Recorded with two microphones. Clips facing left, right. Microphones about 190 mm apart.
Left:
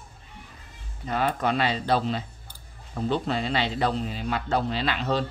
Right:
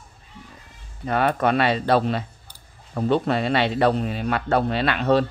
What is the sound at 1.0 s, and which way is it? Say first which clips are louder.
Speech: right 5 dB; 60° right (ahead or behind).